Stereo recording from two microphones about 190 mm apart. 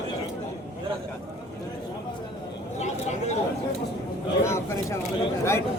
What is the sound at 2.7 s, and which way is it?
Speech, 35° left (ahead or behind).